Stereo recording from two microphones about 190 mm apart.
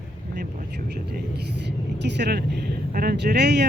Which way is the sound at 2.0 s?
65° right (ahead or behind).